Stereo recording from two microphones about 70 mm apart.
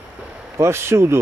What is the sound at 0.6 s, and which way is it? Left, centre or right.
Speech, right.